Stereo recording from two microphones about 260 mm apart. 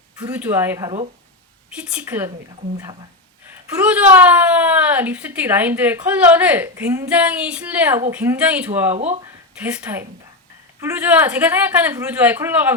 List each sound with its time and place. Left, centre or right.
0.2 s a woman's voice: centre
3.8 s a woman's voice: centre
9.0 s speech: right
9.6 s a woman's voice: centre